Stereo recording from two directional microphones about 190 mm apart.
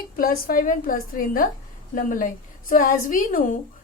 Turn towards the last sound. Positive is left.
turn(degrees=45)  # may be behind; listen again after turning